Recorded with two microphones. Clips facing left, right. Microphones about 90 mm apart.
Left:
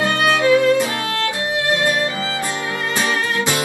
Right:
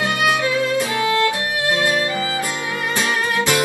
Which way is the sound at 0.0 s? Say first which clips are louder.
Left 2 dB; 20° right (ahead or behind).